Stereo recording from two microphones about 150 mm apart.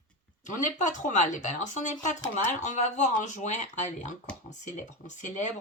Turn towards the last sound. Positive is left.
turn(degrees=55)  # may be behind; listen again after turning